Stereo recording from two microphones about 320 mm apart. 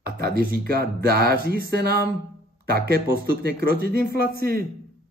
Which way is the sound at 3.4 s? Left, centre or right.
Right.